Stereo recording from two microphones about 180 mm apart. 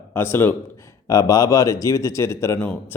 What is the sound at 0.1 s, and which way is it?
Speech, 10° left (ahead or behind).